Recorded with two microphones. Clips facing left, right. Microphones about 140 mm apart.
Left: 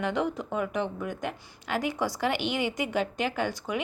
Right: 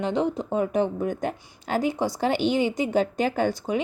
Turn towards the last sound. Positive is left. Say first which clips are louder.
# right 6 dB
turn(degrees=-30)  # may be behind; listen again after turning